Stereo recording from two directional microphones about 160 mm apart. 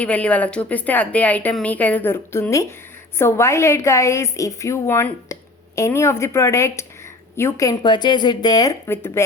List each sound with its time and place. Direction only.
0.0 s a woman's voice: 10° left (ahead or behind); by 8.7 s 25° left (ahead or behind)
8.9 s a woman's voice: 15° left (ahead or behind)